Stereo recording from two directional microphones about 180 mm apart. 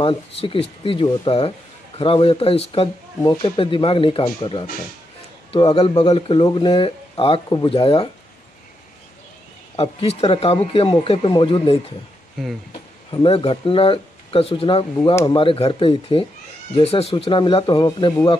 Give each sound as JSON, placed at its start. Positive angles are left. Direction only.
{"t": 0.0, "sound": "speech", "side_deg": 30}
{"t": 9.8, "sound": "speech", "side_deg": 30}
{"t": 13.1, "sound": "speech", "side_deg": 30}